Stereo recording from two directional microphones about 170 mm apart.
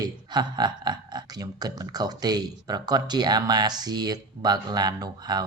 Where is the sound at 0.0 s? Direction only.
25° right (ahead or behind).